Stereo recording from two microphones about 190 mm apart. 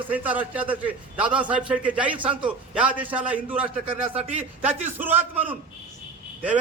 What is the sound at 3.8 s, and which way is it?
Speech, 30° right (ahead or behind).